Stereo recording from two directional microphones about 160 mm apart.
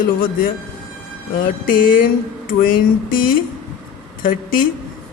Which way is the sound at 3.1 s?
60° left (ahead or behind).